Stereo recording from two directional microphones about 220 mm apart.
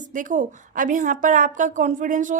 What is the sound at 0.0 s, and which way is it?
A woman's voice, 35° right (ahead or behind).